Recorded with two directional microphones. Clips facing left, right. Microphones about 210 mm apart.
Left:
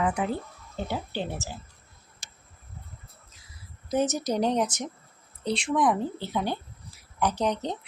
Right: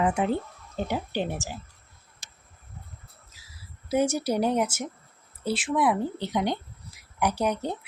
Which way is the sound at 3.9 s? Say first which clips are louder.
Right 2 dB; 10° right (ahead or behind).